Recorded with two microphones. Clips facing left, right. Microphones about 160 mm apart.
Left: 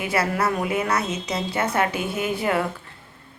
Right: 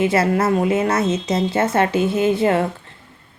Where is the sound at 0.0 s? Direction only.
25° right (ahead or behind).